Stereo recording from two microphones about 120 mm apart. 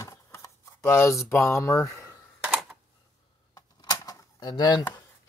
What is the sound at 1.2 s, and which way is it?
Speech, 25° left (ahead or behind).